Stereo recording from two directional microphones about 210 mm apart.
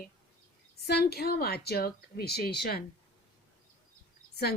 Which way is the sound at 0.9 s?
50° left (ahead or behind).